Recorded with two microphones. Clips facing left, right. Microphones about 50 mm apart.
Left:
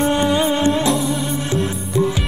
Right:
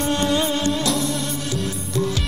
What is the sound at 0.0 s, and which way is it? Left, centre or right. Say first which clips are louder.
Music: left 4 dB; centre.